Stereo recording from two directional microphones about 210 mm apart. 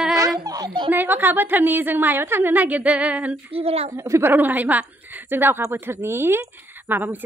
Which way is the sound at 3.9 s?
15° right (ahead or behind).